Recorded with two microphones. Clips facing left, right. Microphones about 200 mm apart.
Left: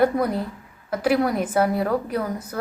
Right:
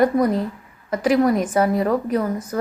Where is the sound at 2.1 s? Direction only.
5° right (ahead or behind).